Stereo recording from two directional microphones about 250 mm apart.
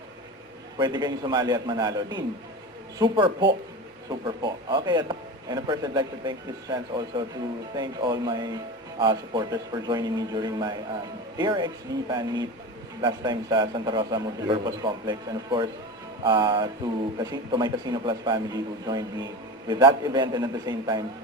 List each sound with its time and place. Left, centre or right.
0.8 s speech: centre
3.0 s music: centre
4.1 s speech: centre
16.2 s music: centre
17.2 s speech: centre